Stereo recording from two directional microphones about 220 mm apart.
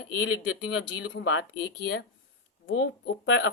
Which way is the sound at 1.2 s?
55° left (ahead or behind).